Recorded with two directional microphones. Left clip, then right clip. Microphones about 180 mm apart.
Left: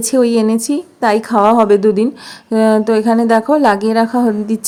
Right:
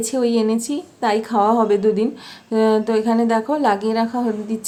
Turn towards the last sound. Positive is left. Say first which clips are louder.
# left 7 dB
turn(degrees=40)  # may be behind; listen again after turning